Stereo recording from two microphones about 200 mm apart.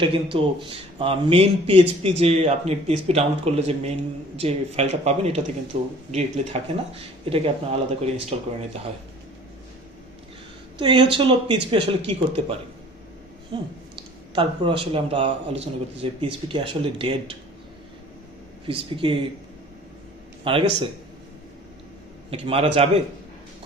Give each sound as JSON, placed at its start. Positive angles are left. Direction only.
{"t": 0.0, "sound": "speech", "side_deg": -25}
{"t": 10.8, "sound": "speech", "side_deg": -25}
{"t": 18.6, "sound": "speech", "side_deg": -25}
{"t": 20.4, "sound": "speech", "side_deg": -25}
{"t": 22.3, "sound": "speech", "side_deg": -30}